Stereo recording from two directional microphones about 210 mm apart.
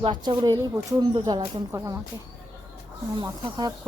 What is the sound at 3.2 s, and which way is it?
Speech, 20° right (ahead or behind).